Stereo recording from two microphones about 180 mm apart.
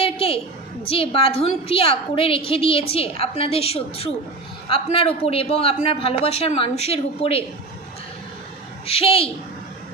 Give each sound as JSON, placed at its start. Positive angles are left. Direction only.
{"t": 0.0, "sound": "a sound", "side_deg": 30}
{"t": 0.8, "sound": "a woman's voice", "side_deg": 30}
{"t": 8.8, "sound": "a woman's voice", "side_deg": 30}